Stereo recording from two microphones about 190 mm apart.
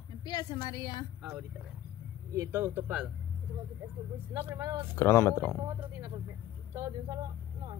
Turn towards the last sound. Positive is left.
turn(degrees=-15)  # may be behind; listen again after turning